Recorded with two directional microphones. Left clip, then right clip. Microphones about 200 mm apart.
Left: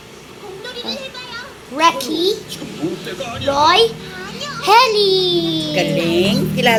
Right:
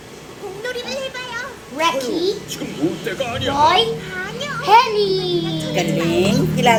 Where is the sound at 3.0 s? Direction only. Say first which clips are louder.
Right 3 dB; 25° right (ahead or behind).